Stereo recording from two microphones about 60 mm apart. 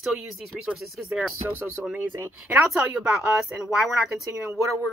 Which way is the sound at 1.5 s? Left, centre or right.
Right.